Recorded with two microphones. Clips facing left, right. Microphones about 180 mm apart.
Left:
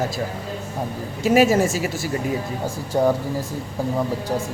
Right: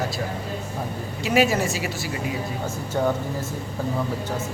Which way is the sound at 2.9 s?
20° left (ahead or behind).